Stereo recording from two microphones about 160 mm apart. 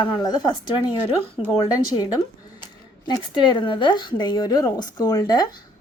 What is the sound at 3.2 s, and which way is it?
A woman's voice, 30° left (ahead or behind).